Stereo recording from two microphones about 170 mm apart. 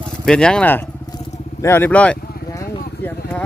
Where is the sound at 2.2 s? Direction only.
65° left (ahead or behind).